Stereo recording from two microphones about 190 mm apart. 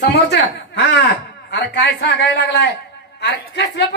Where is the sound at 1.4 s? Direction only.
65° left (ahead or behind).